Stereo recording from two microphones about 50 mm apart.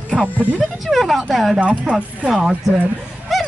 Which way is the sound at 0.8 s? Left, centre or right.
Centre.